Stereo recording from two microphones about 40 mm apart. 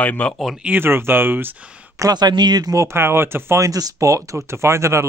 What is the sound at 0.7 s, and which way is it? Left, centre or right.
Speech, right.